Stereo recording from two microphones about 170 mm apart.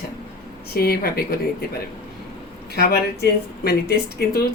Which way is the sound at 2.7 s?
70° left (ahead or behind).